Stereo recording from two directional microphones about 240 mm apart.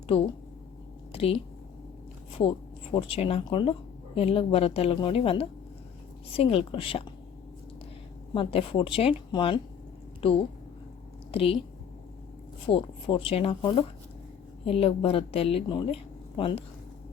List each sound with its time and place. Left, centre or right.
0.1 s speech: left
1.1 s a sound: left
2.3 s speech: left
8.3 s a woman's voice: left
12.6 s speech: left